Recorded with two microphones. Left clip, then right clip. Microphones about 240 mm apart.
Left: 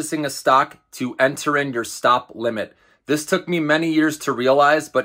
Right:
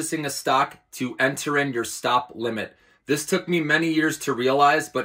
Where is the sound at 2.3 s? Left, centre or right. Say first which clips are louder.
Left 4 dB; centre.